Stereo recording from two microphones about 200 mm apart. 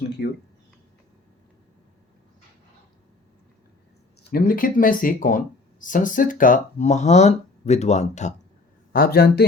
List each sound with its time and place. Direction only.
4.2 s speech: 45° left (ahead or behind)
8.9 s speech: 50° left (ahead or behind)